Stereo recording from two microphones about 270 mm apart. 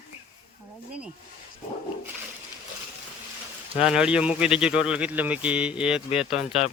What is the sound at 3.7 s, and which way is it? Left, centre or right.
Speech, centre.